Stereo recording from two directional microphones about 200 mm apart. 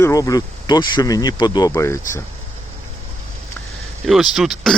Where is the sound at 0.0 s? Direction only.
15° left (ahead or behind).